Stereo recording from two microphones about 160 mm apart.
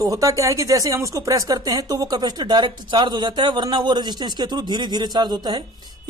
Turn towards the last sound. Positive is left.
turn(degrees=-25)  # may be behind; listen again after turning